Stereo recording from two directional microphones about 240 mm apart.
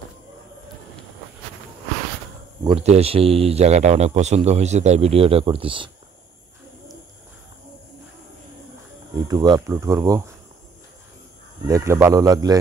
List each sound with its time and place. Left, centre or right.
2.6 s speech: right
9.3 s speech: centre
11.6 s speech: centre